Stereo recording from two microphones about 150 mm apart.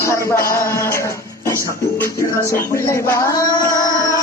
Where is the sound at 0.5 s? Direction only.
15° left (ahead or behind).